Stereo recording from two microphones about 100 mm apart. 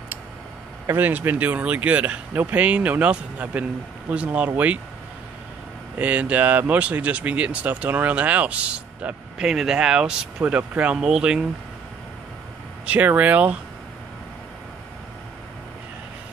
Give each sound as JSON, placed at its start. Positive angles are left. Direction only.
{"t": 0.8, "sound": "speech", "side_deg": -20}
{"t": 5.9, "sound": "speech", "side_deg": -15}
{"t": 12.8, "sound": "speech", "side_deg": -15}